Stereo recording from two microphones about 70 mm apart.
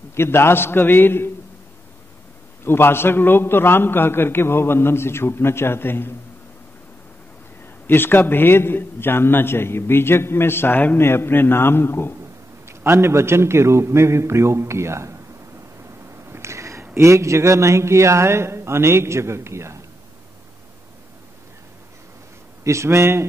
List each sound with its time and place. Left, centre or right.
0.1 s a man's voice: left
2.6 s a man's voice: left
7.8 s a man's voice: left
12.6 s a man's voice: right
16.3 s a sound: right
16.9 s a man's voice: right
22.6 s a man's voice: right